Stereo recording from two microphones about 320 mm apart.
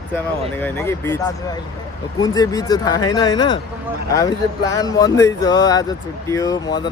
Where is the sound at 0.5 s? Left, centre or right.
Centre.